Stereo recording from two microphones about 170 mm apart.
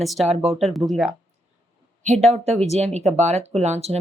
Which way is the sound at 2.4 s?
40° right (ahead or behind).